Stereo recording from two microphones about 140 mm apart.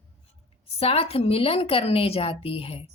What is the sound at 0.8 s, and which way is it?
A woman's voice, 45° left (ahead or behind).